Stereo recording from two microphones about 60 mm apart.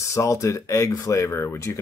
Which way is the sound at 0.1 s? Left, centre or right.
Left.